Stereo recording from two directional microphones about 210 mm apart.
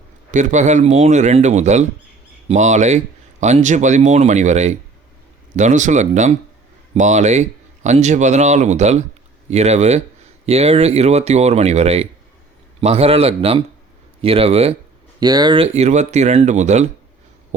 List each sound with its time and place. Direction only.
0.3 s a man's voice: 35° right (ahead or behind)
15.2 s a man's voice: 20° right (ahead or behind); by 16.9 s 35° right (ahead or behind)